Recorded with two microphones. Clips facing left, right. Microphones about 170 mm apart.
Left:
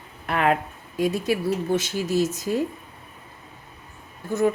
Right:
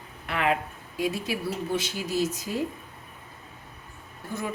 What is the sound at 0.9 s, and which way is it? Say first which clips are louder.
Speech: left 6 dB; 45° left (ahead or behind).